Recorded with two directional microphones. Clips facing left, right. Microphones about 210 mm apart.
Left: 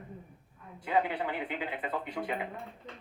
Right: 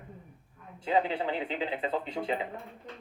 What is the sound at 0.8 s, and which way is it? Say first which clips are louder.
Speech: right 2 dB; 25° right (ahead or behind).